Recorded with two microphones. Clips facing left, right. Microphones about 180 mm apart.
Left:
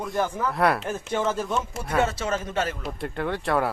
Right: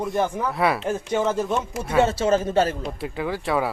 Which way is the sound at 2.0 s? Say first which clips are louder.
Right 7 dB; 30° right (ahead or behind).